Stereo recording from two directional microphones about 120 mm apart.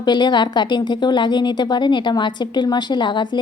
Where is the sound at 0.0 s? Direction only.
40° left (ahead or behind).